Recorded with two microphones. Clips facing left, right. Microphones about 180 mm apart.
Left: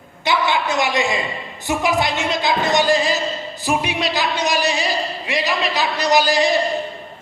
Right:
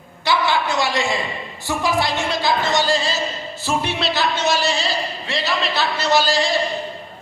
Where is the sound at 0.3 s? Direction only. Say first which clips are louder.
Even; 20° left (ahead or behind).